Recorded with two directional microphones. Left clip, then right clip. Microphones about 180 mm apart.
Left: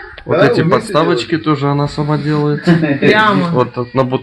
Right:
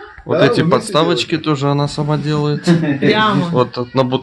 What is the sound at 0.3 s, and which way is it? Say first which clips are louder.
Speech: left 2 dB; centre (ahead or behind).